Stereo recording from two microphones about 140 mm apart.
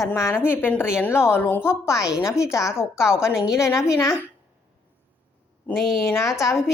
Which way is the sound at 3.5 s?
20° left (ahead or behind).